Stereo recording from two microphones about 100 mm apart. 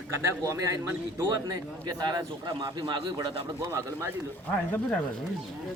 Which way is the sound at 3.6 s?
25° right (ahead or behind).